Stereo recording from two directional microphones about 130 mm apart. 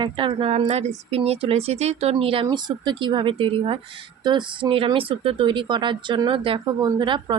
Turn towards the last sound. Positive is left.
turn(degrees=-35)  # may be behind; listen again after turning